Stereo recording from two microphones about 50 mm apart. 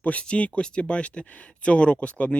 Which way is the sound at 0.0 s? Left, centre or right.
Left.